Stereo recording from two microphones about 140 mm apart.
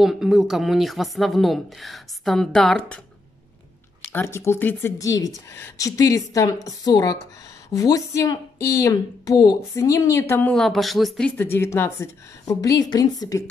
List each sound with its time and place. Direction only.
0.0 s a woman's voice: 5° right (ahead or behind)
4.1 s speech: 15° left (ahead or behind)
10.5 s speech: centre (ahead or behind); by 13.4 s 25° left (ahead or behind)